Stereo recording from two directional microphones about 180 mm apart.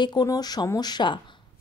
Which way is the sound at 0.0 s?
20° left (ahead or behind).